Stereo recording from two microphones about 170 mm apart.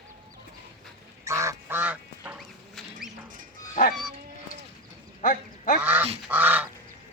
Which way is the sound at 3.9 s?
Centre (ahead or behind).